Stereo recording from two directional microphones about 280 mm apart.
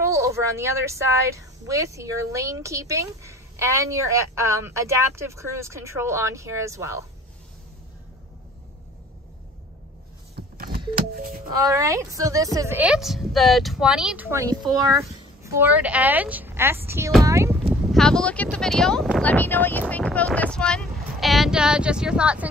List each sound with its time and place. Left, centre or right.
0.0 s a woman's voice: centre
10.3 s power windows: right
11.0 s music: right
11.6 s a woman's voice: centre
17.9 s speech: centre